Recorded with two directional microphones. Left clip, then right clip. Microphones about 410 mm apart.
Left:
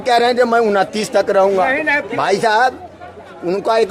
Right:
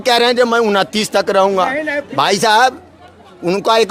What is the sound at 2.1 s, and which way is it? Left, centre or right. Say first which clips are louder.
A man's voice: right 5 dB; right.